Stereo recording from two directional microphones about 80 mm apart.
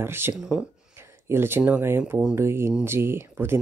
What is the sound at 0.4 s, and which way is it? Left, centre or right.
Speech, centre.